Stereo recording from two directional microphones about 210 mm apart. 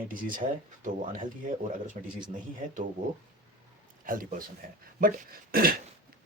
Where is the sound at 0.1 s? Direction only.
40° right (ahead or behind).